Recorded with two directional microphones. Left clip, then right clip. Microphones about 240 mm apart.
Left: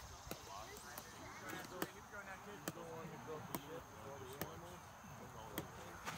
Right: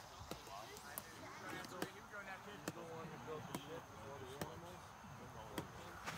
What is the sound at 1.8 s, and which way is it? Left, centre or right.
Basketball bounce, left.